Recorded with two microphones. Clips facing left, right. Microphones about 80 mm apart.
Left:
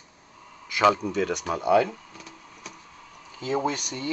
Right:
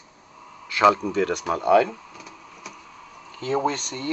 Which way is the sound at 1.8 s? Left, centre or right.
Centre.